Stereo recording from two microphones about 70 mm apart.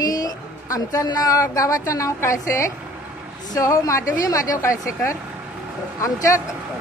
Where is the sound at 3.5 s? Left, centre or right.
Left.